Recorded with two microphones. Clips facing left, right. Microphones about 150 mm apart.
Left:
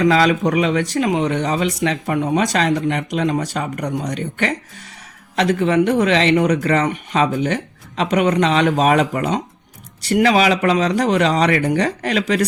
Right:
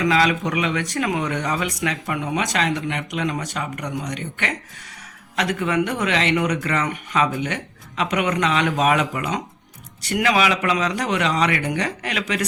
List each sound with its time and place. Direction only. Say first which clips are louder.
0.0 s speech: left 5 dB; 35° left (ahead or behind)